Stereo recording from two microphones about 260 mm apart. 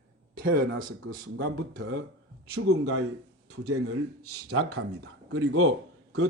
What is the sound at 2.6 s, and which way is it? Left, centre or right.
A man's voice, right.